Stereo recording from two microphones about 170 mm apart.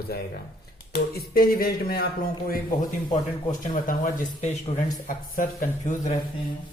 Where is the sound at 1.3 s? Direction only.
60° left (ahead or behind).